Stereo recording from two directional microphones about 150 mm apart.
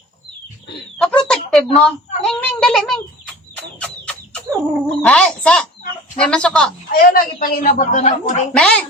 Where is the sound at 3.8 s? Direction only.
10° left (ahead or behind).